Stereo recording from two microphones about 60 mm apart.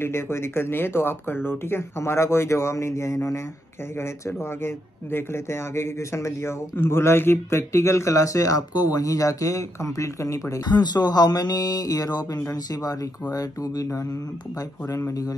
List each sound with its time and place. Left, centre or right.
0.0 s speech: left
11.3 s speech: left